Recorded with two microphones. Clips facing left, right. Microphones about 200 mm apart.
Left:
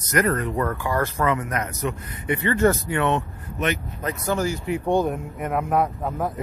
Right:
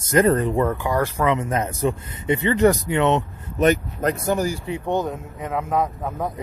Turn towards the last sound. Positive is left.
turn(degrees=10)  # may be behind; listen again after turning